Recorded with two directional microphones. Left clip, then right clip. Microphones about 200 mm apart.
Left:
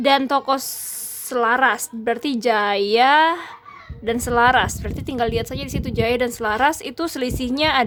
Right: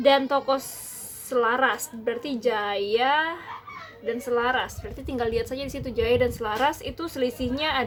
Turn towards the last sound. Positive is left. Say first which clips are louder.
# left 7 dB
turn(degrees=45)  # may be behind; listen again after turning